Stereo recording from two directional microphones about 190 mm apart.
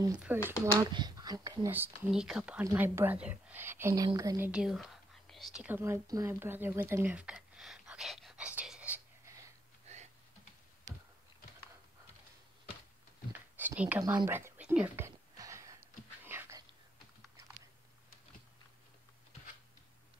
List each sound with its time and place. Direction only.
0.5 s speech: 20° right (ahead or behind)
2.0 s speech: 5° right (ahead or behind); by 4.5 s 20° right (ahead or behind)
4.5 s whispering: 5° right (ahead or behind)
9.9 s typing: 35° right (ahead or behind)
13.3 s a sound: 10° right (ahead or behind)